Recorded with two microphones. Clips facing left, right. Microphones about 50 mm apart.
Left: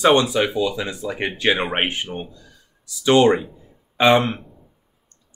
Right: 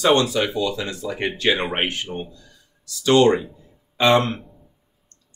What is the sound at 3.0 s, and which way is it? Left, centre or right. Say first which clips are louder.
Speech: left 1 dB; left.